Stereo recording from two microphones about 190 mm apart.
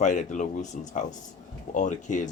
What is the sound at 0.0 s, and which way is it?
Speech, 40° left (ahead or behind).